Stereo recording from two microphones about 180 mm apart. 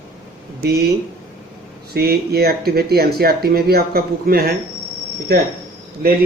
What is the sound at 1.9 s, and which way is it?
Speech, 60° right (ahead or behind).